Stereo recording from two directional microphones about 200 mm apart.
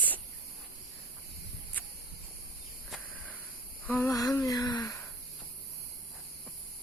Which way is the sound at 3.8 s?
10° left (ahead or behind).